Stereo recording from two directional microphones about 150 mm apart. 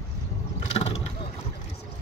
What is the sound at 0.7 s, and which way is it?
Vehicle, 40° left (ahead or behind).